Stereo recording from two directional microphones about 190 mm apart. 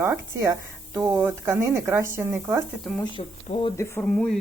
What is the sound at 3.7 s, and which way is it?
Speech, 15° left (ahead or behind).